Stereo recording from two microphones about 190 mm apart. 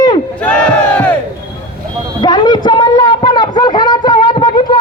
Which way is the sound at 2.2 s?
20° left (ahead or behind).